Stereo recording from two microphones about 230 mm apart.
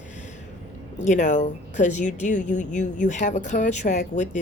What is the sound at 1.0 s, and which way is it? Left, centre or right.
Speech, left.